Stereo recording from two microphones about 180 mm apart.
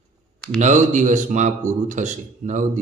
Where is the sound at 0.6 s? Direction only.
45° right (ahead or behind).